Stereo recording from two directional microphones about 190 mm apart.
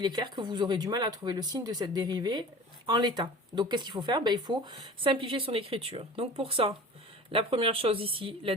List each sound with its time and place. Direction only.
0.0 s speech: 20° right (ahead or behind)